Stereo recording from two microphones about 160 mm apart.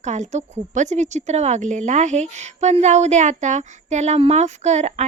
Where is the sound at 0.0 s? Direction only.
50° right (ahead or behind).